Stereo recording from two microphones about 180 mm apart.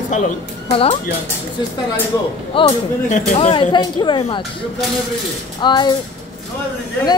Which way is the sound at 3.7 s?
25° left (ahead or behind).